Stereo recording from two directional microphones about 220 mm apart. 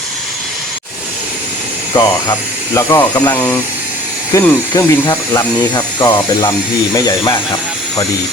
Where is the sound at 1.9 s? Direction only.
15° left (ahead or behind).